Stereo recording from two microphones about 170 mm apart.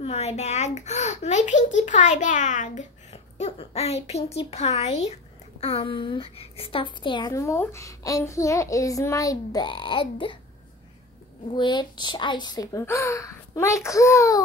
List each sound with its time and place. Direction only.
0.0 s a child's voice: 40° left (ahead or behind)
11.5 s a woman's voice: 25° left (ahead or behind)